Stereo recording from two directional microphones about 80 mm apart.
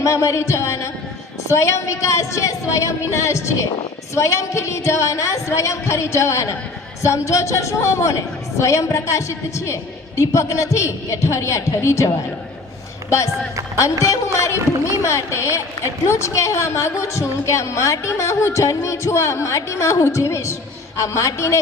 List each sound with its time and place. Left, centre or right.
0.0 s a woman's voice: left
14.3 s a woman's voice: left